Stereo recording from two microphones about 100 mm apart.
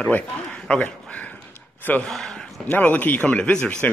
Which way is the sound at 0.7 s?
10° left (ahead or behind).